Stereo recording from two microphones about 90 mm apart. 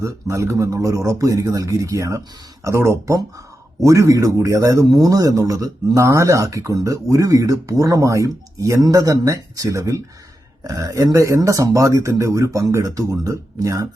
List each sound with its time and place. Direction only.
0.0 s a man's voice: 35° right (ahead or behind)